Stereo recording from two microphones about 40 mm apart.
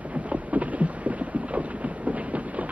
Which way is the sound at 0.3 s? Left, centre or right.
Right.